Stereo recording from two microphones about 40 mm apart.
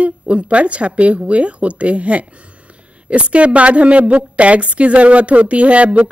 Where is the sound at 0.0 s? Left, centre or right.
Right.